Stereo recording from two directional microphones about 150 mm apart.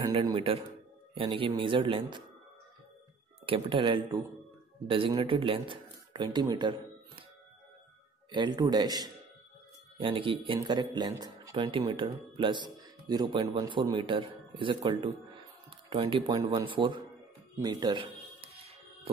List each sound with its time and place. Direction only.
0.0 s a man's voice: 30° right (ahead or behind)
3.4 s a man's voice: 35° right (ahead or behind)
8.3 s a man's voice: 30° right (ahead or behind)